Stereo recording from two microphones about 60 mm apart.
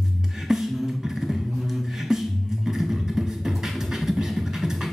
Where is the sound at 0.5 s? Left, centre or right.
Centre.